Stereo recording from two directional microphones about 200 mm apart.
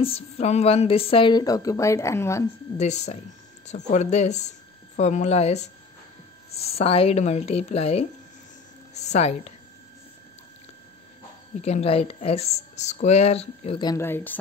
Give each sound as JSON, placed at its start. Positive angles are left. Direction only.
{"t": 0.0, "sound": "speech", "side_deg": 30}
{"t": 2.8, "sound": "speech", "side_deg": 35}
{"t": 11.6, "sound": "speech", "side_deg": 30}